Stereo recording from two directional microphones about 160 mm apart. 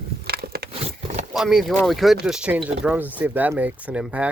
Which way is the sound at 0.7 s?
40° right (ahead or behind).